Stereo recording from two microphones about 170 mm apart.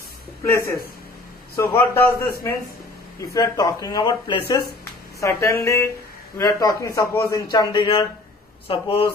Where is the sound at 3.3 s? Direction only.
20° left (ahead or behind).